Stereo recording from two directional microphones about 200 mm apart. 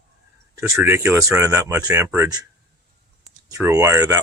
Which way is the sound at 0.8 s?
10° right (ahead or behind).